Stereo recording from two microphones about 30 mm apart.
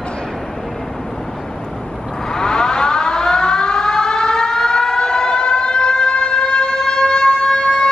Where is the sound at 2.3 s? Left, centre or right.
Left.